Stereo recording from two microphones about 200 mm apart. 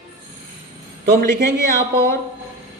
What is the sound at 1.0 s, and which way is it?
Speech, 55° right (ahead or behind).